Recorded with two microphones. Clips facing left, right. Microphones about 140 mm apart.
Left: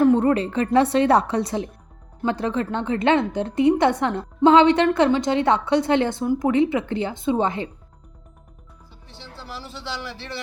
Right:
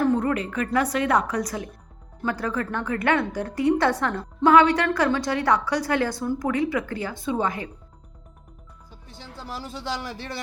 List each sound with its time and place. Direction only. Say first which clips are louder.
0.0 s a woman's voice: left 5 dB; 30° left (ahead or behind)
8.9 s music: right 1 dB; 45° right (ahead or behind)
9.5 s speech: right 3 dB; 45° right (ahead or behind)